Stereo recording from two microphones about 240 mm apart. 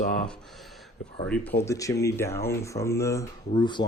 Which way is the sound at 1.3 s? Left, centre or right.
Centre.